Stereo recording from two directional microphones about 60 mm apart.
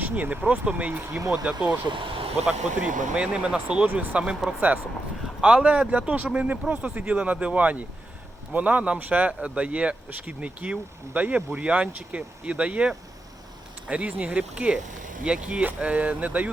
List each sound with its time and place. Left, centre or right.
0.0 s speech: right